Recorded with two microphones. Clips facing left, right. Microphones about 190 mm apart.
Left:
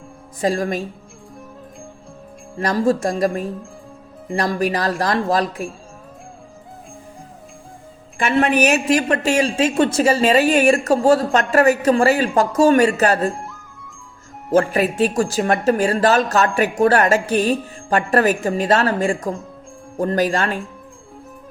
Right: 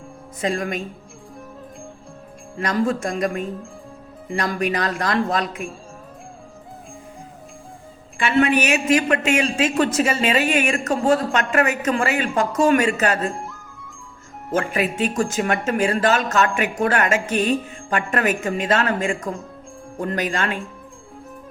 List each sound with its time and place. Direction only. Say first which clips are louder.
0.4 s a woman's voice: left 4 dB; 35° left (ahead or behind)
2.6 s a woman's voice: left 3 dB; 35° left (ahead or behind)
8.2 s a woman's voice: left 2 dB; 40° left (ahead or behind)
13.3 s music: even; centre (ahead or behind)
14.5 s a woman's voice: left 5 dB; 35° left (ahead or behind)